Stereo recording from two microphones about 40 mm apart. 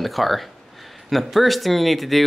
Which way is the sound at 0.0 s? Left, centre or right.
Centre.